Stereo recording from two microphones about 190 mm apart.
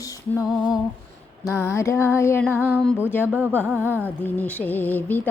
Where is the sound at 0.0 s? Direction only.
15° left (ahead or behind).